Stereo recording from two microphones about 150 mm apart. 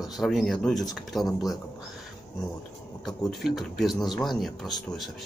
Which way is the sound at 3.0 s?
Centre (ahead or behind).